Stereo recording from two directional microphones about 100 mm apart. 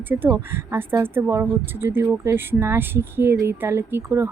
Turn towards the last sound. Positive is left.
turn(degrees=-25)  # may be behind; listen again after turning